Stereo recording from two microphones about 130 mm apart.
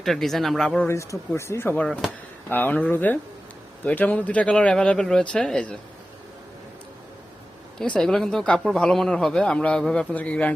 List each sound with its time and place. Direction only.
0.0 s speech: centre (ahead or behind)
0.9 s speech: 20° left (ahead or behind)
7.9 s speech: 5° left (ahead or behind)